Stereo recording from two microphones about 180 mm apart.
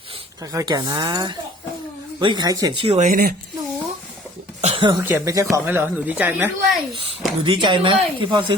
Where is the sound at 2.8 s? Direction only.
40° right (ahead or behind).